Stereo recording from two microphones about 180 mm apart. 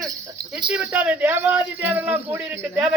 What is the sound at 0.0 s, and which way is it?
Jingle bell, 20° right (ahead or behind).